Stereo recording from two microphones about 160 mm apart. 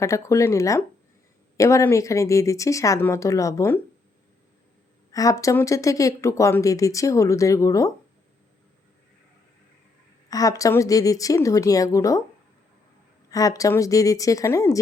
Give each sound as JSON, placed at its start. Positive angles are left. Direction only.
{"t": 0.0, "sound": "speech", "side_deg": 20}
{"t": 5.1, "sound": "speech", "side_deg": 20}
{"t": 10.2, "sound": "speech", "side_deg": 20}
{"t": 13.3, "sound": "speech", "side_deg": 20}